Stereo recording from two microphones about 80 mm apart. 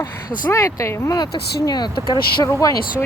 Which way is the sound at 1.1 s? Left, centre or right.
Left.